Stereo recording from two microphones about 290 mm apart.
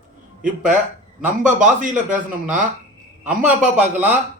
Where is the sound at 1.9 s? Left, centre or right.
Centre.